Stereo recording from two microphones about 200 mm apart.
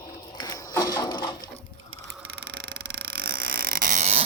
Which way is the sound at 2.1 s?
55° right (ahead or behind).